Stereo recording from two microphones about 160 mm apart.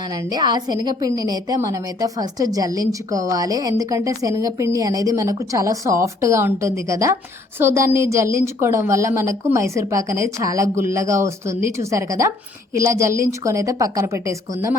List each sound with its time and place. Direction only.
0.3 s a woman's voice: 25° right (ahead or behind)